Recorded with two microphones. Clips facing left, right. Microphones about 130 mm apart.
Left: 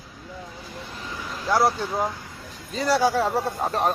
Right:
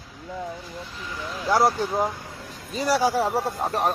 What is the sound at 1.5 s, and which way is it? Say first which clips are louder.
Speech: right 1 dB; 20° right (ahead or behind).